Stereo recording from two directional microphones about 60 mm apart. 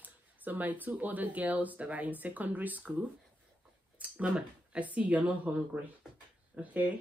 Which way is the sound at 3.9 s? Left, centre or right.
Right.